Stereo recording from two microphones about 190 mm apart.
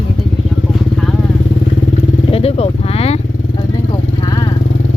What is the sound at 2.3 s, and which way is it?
Vehicle, 30° left (ahead or behind).